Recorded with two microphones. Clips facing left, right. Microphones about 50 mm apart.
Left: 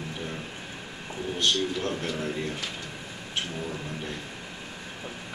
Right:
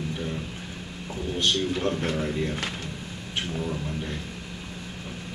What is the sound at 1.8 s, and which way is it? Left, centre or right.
Speech, centre.